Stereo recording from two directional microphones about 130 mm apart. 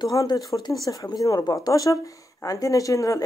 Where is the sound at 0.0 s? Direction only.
30° left (ahead or behind).